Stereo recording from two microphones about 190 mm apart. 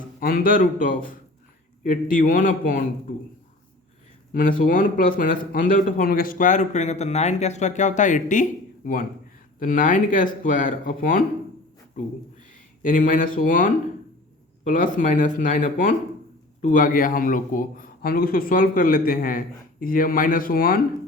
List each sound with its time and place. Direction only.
0.2 s a man's voice: 50° left (ahead or behind)
4.4 s a man's voice: 45° left (ahead or behind)
12.8 s a man's voice: 45° left (ahead or behind)